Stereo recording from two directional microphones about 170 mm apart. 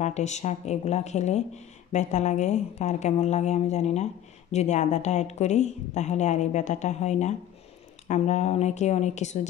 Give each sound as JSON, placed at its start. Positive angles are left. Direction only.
{"t": 0.0, "sound": "speech", "side_deg": 45}